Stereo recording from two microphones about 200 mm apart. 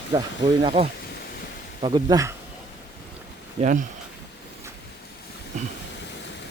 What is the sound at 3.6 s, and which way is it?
Speech, 40° right (ahead or behind).